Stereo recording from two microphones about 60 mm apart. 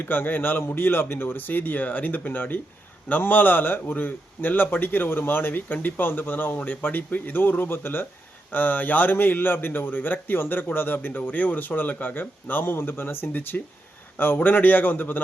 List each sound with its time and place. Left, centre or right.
0.0 s a man's voice: left